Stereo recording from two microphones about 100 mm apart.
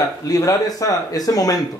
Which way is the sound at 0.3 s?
35° left (ahead or behind).